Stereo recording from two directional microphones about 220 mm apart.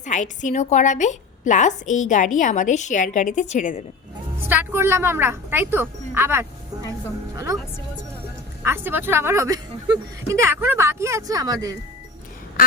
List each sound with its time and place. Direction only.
0.0 s a woman's voice: 35° left (ahead or behind)
4.4 s speech: 10° right (ahead or behind)
8.6 s speech: 10° right (ahead or behind)